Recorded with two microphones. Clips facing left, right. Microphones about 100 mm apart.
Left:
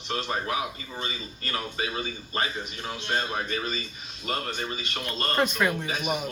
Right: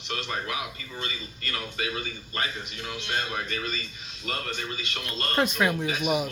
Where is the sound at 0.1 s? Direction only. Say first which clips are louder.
Left 3 dB; 30° left (ahead or behind).